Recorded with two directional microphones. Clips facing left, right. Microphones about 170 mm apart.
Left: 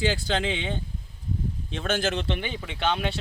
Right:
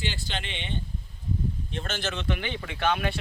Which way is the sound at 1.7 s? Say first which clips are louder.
Left 6 dB; 80° left.